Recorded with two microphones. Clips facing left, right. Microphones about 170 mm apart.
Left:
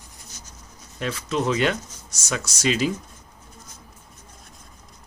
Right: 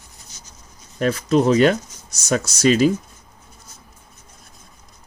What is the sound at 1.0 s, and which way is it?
Speech, 40° right (ahead or behind).